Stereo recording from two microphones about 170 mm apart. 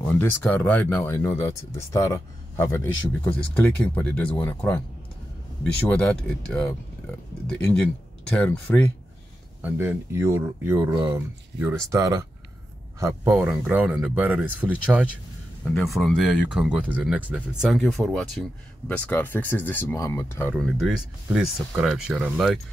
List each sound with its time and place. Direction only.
0.1 s speech: 10° left (ahead or behind)
5.9 s speech: 10° left (ahead or behind)
8.4 s speech: 10° left (ahead or behind)
9.6 s speech: 10° right (ahead or behind)
19.0 s speech: 10° left (ahead or behind)
20.5 s speech: centre (ahead or behind)